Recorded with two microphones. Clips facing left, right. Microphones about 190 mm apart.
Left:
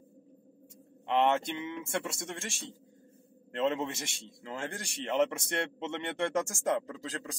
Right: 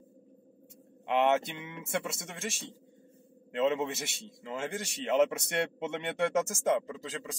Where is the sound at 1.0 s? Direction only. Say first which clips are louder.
Right 1 dB; 5° right (ahead or behind).